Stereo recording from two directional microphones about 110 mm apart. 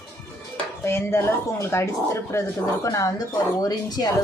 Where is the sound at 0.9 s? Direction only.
25° left (ahead or behind).